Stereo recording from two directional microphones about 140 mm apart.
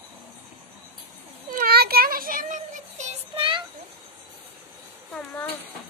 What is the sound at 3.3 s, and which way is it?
Child singing, 35° right (ahead or behind).